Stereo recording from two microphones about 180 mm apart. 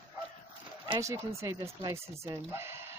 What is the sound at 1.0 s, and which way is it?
Speech, 15° right (ahead or behind).